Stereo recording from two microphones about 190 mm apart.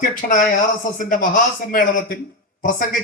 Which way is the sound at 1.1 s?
45° left (ahead or behind).